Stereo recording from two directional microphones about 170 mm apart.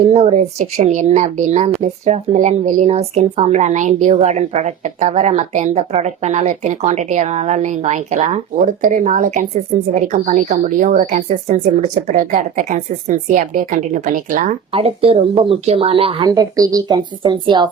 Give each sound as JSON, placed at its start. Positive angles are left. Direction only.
{"t": 0.0, "sound": "a woman's voice", "side_deg": -40}
{"t": 14.7, "sound": "speech", "side_deg": -35}